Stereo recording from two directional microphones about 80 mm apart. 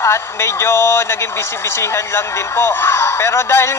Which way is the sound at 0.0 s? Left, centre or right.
Left.